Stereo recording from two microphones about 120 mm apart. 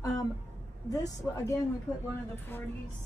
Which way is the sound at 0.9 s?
30° left (ahead or behind).